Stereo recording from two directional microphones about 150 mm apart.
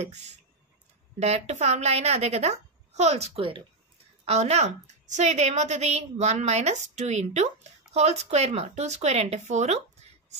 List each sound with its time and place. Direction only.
1.2 s a woman's voice: 45° right (ahead or behind)